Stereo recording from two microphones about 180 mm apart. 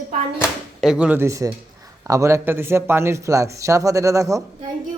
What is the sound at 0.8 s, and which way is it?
Speech, 5° right (ahead or behind).